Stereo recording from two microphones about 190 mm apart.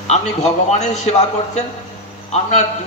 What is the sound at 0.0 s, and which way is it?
A man's voice, 35° left (ahead or behind).